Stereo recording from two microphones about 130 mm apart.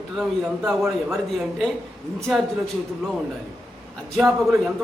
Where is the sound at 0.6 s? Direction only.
15° right (ahead or behind).